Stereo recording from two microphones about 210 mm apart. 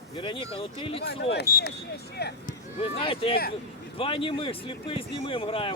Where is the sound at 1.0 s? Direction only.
50° left (ahead or behind).